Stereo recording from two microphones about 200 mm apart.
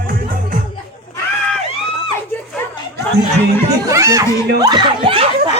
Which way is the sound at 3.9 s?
15° right (ahead or behind).